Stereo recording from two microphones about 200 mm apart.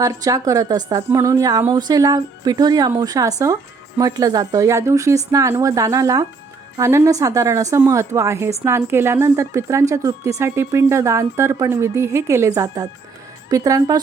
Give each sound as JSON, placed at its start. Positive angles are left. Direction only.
{"t": 0.0, "sound": "speech", "side_deg": -15}